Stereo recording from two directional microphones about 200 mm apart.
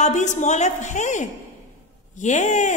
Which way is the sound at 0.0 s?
35° left (ahead or behind).